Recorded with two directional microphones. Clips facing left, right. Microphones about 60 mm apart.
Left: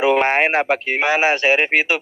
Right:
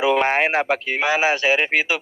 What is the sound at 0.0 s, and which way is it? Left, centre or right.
A man's voice, left.